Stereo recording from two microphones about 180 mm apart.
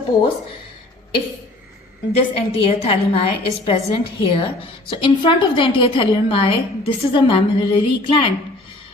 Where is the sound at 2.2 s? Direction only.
30° left (ahead or behind).